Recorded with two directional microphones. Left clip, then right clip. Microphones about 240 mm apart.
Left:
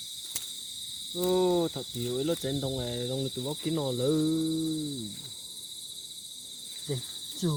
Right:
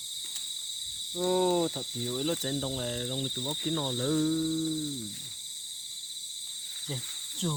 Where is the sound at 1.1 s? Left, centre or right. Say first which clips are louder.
Left 1 dB; right.